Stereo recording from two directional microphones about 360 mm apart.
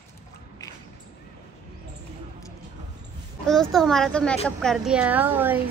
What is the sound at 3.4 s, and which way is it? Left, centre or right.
A woman's voice, centre.